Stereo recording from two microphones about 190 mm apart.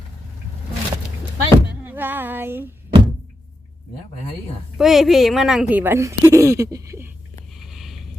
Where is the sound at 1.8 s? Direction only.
10° right (ahead or behind).